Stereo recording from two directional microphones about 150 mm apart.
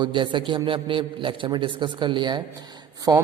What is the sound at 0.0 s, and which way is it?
A woman's voice, 35° right (ahead or behind).